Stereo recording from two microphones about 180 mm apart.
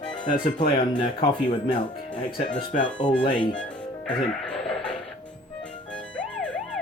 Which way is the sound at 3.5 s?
5° left (ahead or behind).